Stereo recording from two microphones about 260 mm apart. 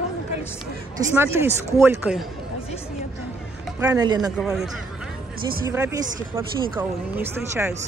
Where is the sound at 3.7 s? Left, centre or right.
Centre.